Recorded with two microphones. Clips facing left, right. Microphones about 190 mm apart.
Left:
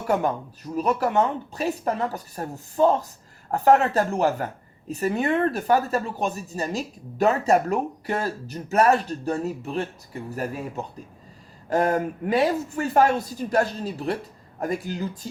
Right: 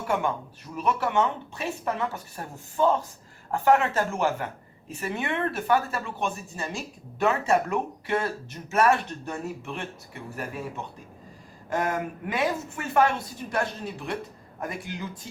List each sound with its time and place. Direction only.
0.1 s speech: 40° left (ahead or behind)
11.7 s speech: 40° left (ahead or behind)